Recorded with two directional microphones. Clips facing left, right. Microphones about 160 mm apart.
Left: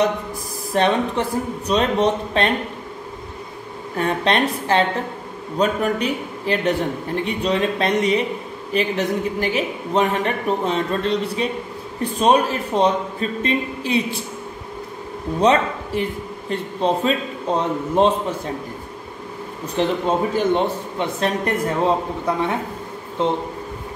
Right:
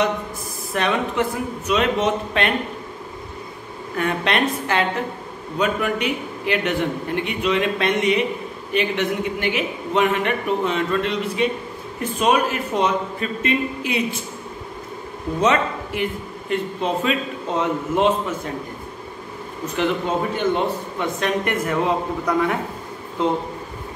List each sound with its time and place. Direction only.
0.7 s a man's voice: 35° left (ahead or behind)
3.9 s a man's voice: 35° left (ahead or behind)
15.4 s a man's voice: 35° left (ahead or behind)
19.6 s a man's voice: 35° left (ahead or behind)